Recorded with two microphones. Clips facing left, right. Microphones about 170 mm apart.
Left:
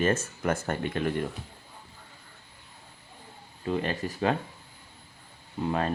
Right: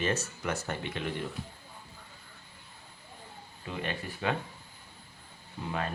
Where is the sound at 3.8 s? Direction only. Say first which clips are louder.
Left 2 dB; 40° left (ahead or behind).